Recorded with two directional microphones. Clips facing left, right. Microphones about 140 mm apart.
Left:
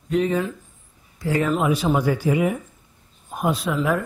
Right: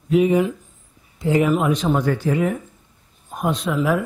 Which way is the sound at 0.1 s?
10° right (ahead or behind).